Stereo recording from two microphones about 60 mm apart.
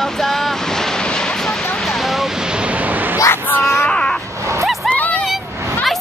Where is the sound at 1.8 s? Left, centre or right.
Centre; by 3.2 s right.